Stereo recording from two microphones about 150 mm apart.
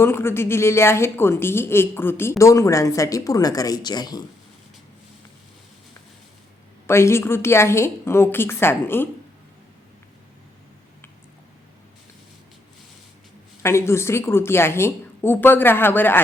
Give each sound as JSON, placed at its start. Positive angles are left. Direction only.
{"t": 0.0, "sound": "a woman's voice", "side_deg": 15}
{"t": 6.8, "sound": "a woman's voice", "side_deg": 15}
{"t": 13.6, "sound": "a woman's voice", "side_deg": 15}